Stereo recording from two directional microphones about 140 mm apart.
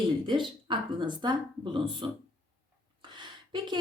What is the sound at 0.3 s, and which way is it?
A woman's voice, 35° right (ahead or behind).